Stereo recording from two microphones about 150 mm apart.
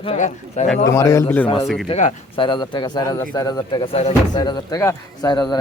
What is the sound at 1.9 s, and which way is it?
Speech, 50° left (ahead or behind).